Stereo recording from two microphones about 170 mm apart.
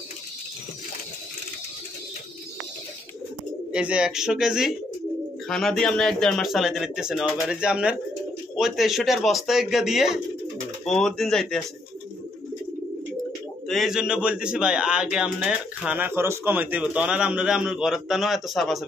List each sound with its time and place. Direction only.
3.7 s a man's voice: 5° right (ahead or behind)
13.7 s a man's voice: centre (ahead or behind)